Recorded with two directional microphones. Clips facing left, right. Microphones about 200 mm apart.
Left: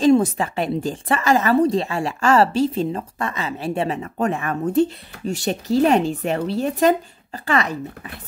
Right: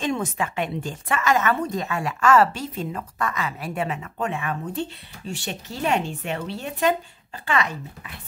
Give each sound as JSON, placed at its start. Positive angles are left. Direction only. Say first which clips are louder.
{"t": 0.0, "sound": "a woman's voice", "louder": "left 10 dB", "side_deg": 35}